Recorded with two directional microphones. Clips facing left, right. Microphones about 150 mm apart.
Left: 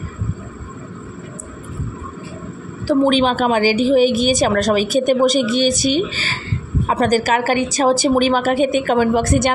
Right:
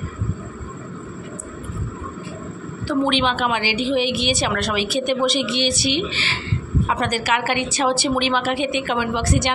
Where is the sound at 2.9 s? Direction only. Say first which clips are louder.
Left 5 dB; 40° left (ahead or behind).